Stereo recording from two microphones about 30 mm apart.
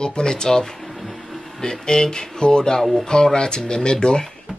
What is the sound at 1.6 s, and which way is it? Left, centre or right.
Speech, left.